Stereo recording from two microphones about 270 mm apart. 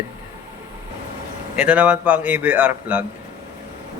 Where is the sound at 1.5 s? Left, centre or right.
Centre.